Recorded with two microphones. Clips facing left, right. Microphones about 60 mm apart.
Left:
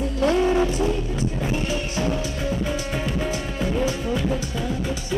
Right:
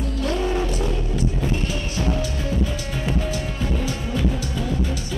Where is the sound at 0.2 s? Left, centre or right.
Left.